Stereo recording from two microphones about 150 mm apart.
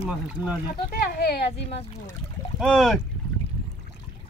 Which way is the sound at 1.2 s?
90° left.